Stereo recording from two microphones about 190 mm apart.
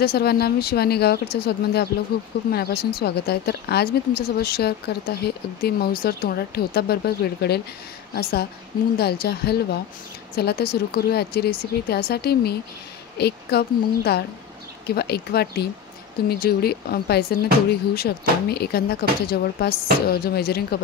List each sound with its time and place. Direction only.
0.0 s speech: 55° left (ahead or behind)